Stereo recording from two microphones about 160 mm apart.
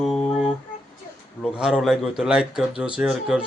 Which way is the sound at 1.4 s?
5° right (ahead or behind).